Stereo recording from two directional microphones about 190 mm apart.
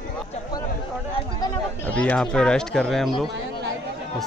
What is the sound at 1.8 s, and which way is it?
Speech, 5° left (ahead or behind).